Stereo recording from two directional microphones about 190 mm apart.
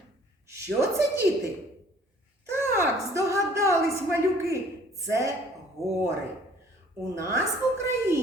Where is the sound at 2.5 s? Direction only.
15° right (ahead or behind).